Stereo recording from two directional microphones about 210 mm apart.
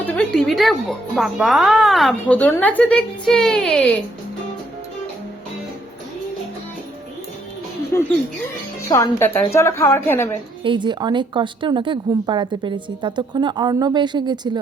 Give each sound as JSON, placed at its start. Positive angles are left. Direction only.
{"t": 0.0, "sound": "music", "side_deg": 5}
{"t": 0.3, "sound": "speech", "side_deg": 0}
{"t": 8.9, "sound": "a woman's voice", "side_deg": 15}
{"t": 10.6, "sound": "speech", "side_deg": -20}